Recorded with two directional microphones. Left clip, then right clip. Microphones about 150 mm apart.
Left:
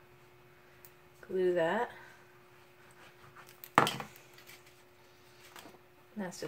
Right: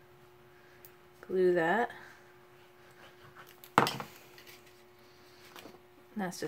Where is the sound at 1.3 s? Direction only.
60° right (ahead or behind).